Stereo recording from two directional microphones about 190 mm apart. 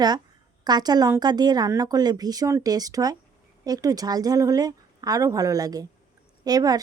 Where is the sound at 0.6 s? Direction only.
20° right (ahead or behind).